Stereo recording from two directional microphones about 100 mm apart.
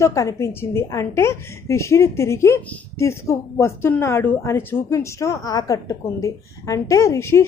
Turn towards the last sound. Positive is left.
turn(degrees=25)  # may be behind; listen again after turning